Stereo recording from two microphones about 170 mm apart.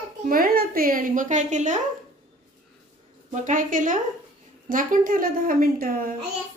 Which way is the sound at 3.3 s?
45° right (ahead or behind).